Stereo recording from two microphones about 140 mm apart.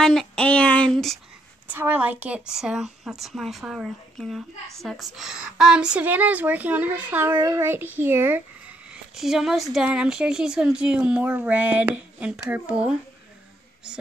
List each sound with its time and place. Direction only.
0.0 s a sound: 5° left (ahead or behind)
1.7 s a woman's voice: 10° right (ahead or behind)
8.9 s a woman's voice: 5° right (ahead or behind)